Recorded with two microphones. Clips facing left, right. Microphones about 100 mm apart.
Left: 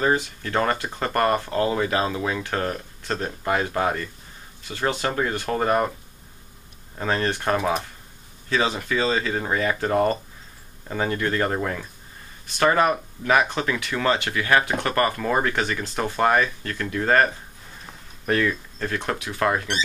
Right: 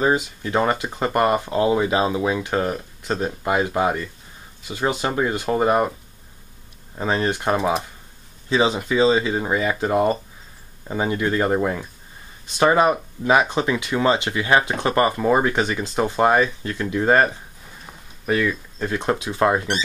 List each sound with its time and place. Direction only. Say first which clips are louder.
0.0 s speech: right 2 dB; 15° right (ahead or behind)
7.0 s speech: right 2 dB; 15° right (ahead or behind)
17.8 s a sound: right 1 dB; 5° right (ahead or behind)
18.9 s speech: right 5 dB; 20° right (ahead or behind)